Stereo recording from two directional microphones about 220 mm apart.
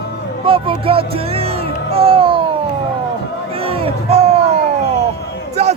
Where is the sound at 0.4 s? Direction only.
25° right (ahead or behind).